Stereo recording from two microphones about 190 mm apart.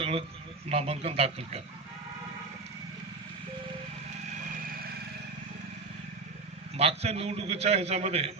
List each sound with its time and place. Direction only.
0.0 s a sound: 30° right (ahead or behind)
0.7 s a man's voice: 30° right (ahead or behind)
6.7 s a man's voice: 35° right (ahead or behind)